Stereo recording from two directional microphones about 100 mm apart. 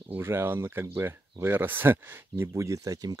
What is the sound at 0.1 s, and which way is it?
Speech, 25° right (ahead or behind).